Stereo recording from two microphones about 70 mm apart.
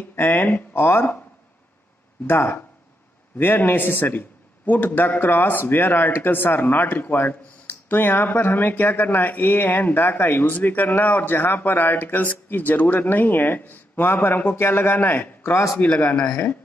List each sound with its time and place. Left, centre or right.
0.1 s speech: left
2.2 s a man's voice: left
15.8 s speech: left